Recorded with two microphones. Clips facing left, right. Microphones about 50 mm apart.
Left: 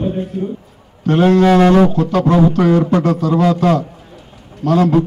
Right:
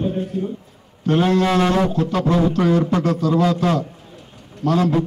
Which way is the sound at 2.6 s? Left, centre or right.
Left.